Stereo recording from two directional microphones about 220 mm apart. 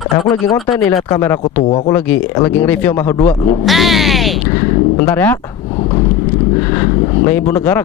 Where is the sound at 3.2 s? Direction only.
30° left (ahead or behind).